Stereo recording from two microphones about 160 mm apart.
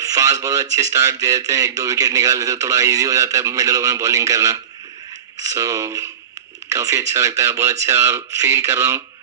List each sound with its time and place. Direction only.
0.0 s speech: 20° right (ahead or behind)